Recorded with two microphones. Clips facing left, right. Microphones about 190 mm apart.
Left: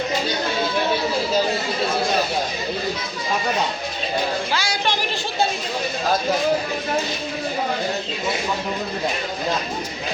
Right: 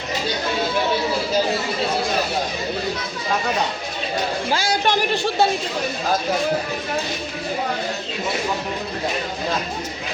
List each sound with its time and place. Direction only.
4.5 s a woman's voice: 50° right (ahead or behind)